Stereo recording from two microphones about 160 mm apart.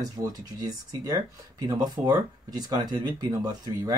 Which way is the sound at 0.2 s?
25° right (ahead or behind).